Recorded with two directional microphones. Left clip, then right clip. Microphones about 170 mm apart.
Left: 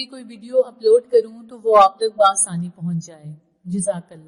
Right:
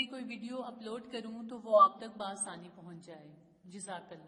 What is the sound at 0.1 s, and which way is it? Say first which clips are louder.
Speech: left 19 dB; 25° left (ahead or behind).